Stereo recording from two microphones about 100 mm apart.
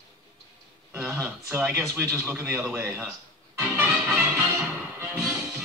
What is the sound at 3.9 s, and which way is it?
Music, 10° right (ahead or behind).